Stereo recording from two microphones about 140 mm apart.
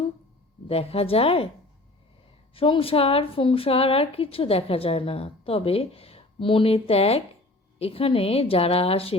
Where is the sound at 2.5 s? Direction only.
40° left (ahead or behind).